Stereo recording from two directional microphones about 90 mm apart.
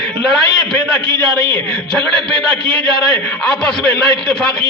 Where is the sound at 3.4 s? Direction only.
10° left (ahead or behind).